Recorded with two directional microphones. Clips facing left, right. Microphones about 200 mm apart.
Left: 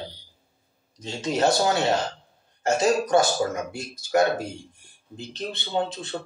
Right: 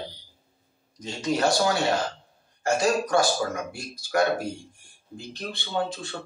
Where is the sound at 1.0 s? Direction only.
25° left (ahead or behind).